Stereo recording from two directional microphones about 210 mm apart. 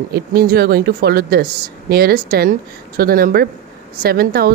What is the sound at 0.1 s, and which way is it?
A woman's voice, 50° right (ahead or behind).